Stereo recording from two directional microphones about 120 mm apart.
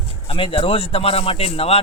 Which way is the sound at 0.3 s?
45° left (ahead or behind).